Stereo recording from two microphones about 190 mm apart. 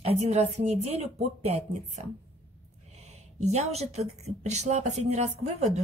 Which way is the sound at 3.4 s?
35° right (ahead or behind).